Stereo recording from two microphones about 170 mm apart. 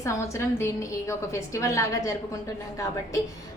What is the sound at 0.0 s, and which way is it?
A woman's voice, 15° left (ahead or behind).